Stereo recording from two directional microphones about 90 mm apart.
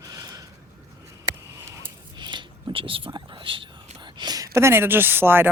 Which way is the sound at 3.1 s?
65° right (ahead or behind).